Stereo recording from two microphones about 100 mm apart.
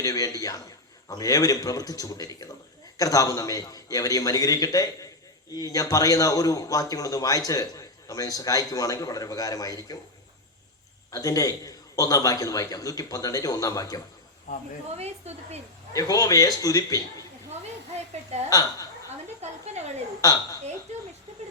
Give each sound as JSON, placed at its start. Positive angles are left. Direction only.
{"t": 0.0, "sound": "a man's voice", "side_deg": 35}
{"t": 11.1, "sound": "a man's voice", "side_deg": 35}
{"t": 14.9, "sound": "speech", "side_deg": -90}
{"t": 15.9, "sound": "a man's voice", "side_deg": 35}
{"t": 18.1, "sound": "speech", "side_deg": -90}
{"t": 18.4, "sound": "a man's voice", "side_deg": 35}
{"t": 19.4, "sound": "a sound", "side_deg": -90}
{"t": 20.2, "sound": "a man's voice", "side_deg": 40}